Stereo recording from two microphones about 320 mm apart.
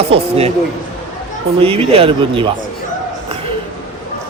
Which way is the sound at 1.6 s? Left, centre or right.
Centre.